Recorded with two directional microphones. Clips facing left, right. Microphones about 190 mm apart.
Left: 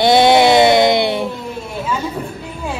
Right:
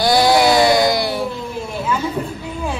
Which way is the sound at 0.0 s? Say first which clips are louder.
Left 3 dB; 25° left (ahead or behind).